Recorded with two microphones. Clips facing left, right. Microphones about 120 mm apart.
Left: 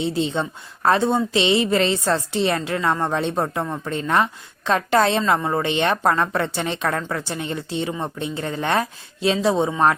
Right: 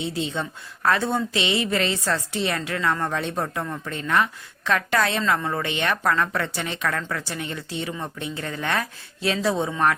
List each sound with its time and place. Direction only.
0.0 s a woman's voice: 30° left (ahead or behind)